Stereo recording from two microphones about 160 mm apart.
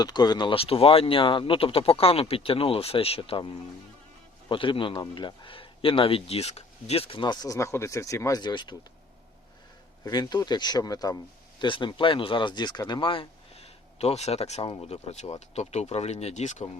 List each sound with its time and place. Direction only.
0.0 s a man's voice: 25° left (ahead or behind)
10.0 s a man's voice: 25° left (ahead or behind); by 16.6 s 45° left (ahead or behind)